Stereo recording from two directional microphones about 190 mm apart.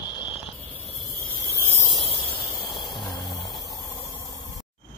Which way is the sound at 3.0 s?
25° left (ahead or behind).